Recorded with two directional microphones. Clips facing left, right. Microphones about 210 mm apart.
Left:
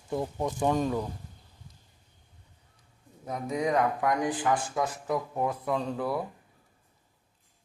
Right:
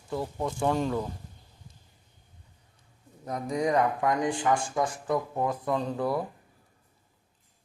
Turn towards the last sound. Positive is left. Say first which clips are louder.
# right 1 dB
turn(degrees=5)  # may be behind; listen again after turning